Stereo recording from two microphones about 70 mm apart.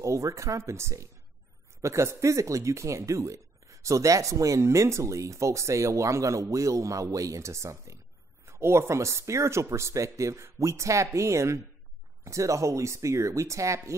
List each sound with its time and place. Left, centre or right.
0.0 s speech: right